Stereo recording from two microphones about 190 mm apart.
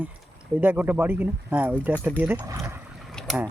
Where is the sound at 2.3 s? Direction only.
15° right (ahead or behind).